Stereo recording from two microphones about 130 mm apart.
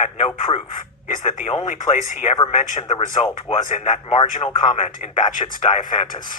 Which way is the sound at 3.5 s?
65° left (ahead or behind).